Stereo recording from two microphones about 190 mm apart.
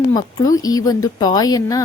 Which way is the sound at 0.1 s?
20° left (ahead or behind).